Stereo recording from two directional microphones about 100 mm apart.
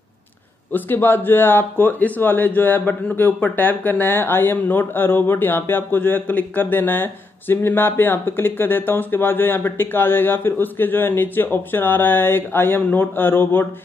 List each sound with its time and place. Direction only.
0.7 s speech: 20° left (ahead or behind)